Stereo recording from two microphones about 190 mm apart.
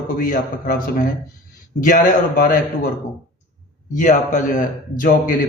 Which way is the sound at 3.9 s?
40° left (ahead or behind).